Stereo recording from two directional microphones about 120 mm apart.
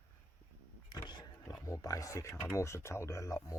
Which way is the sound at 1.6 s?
30° left (ahead or behind).